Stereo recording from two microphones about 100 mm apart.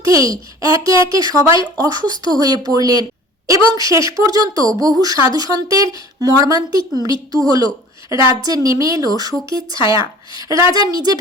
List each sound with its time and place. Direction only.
0.0 s a child's voice: 35° right (ahead or behind)